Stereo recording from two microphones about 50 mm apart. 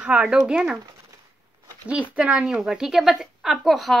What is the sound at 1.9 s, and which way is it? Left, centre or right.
Speech, right.